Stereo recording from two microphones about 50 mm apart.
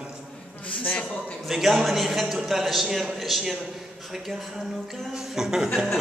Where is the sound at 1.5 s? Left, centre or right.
Centre.